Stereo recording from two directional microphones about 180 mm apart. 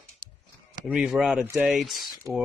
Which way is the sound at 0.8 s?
Centre (ahead or behind).